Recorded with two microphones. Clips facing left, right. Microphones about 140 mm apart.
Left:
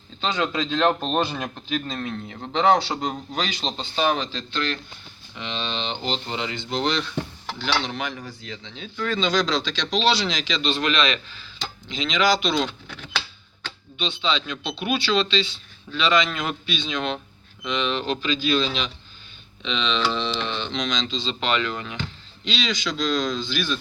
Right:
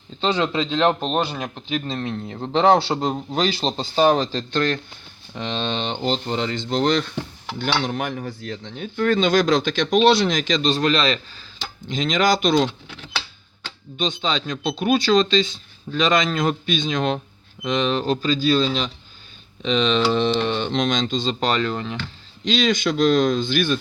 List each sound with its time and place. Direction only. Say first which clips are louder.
0.2 s a man's voice: right 4 dB; 30° right (ahead or behind); by 12.7 s 45° right (ahead or behind)
14.0 s a man's voice: right 2 dB; 45° right (ahead or behind)
22.4 s speech: right 7 dB; 50° right (ahead or behind)